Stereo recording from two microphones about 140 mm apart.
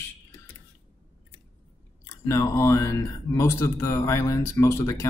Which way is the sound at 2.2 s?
20° left (ahead or behind).